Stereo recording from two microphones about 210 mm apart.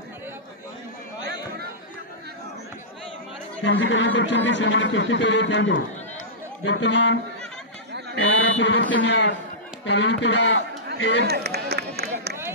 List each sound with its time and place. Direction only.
3.6 s speech: 60° left (ahead or behind)
8.2 s mantra: 60° left (ahead or behind)
9.8 s speech: 55° left (ahead or behind)
11.2 s run: 50° right (ahead or behind)